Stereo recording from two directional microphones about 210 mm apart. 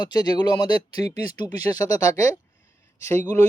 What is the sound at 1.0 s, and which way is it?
Speech, 30° right (ahead or behind).